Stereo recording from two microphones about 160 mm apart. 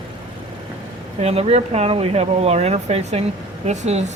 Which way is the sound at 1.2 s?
40° right (ahead or behind).